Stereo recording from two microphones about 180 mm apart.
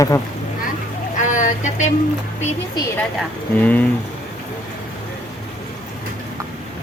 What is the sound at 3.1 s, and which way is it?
Speech, 10° left (ahead or behind).